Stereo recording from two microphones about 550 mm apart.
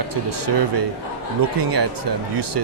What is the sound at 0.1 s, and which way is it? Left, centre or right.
Speech, right.